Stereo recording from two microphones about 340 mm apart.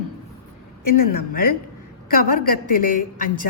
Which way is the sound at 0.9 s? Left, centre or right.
Left.